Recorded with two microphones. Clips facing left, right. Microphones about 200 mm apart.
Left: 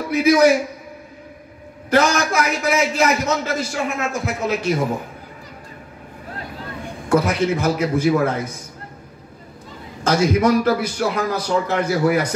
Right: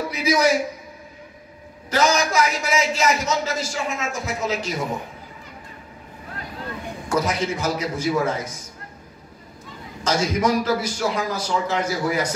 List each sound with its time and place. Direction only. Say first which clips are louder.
0.1 s a man's voice: left 8 dB; 60° left (ahead or behind)
1.9 s a man's voice: left 3 dB; 60° left (ahead or behind)
7.1 s a man's voice: left 5 dB; 60° left (ahead or behind)
10.0 s a man's voice: left 5 dB; 55° left (ahead or behind)